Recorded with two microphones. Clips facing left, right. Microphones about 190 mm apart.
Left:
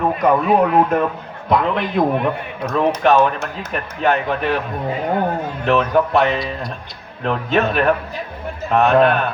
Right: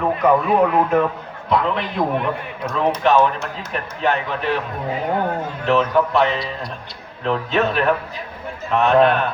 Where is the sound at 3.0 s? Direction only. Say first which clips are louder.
Even; 50° left (ahead or behind).